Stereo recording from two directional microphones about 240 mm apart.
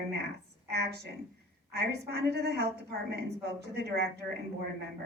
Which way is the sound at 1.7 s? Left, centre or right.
Right.